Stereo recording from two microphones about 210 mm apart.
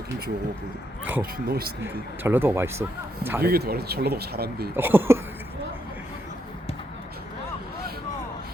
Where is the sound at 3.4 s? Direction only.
50° right (ahead or behind).